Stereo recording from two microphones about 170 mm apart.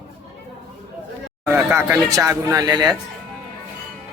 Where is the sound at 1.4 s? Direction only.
15° right (ahead or behind).